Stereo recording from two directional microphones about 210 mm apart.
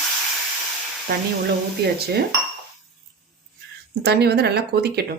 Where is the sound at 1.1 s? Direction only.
50° right (ahead or behind).